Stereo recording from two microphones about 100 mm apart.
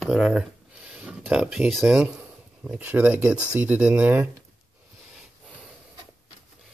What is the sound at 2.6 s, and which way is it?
Speech, 15° right (ahead or behind).